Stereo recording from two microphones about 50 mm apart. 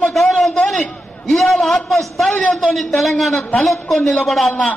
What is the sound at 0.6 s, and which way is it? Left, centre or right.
A man's voice, centre.